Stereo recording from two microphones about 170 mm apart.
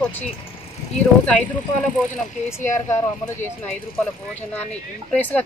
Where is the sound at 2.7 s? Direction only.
15° left (ahead or behind).